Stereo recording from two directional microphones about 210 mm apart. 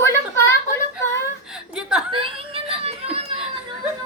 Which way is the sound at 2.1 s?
25° right (ahead or behind).